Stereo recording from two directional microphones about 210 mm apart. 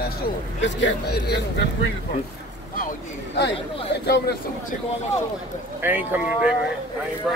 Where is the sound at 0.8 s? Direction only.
50° left (ahead or behind).